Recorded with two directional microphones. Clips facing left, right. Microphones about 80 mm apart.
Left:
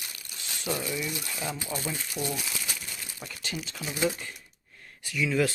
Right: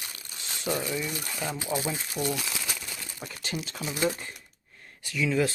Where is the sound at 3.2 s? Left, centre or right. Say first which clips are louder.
Right 2 dB; right.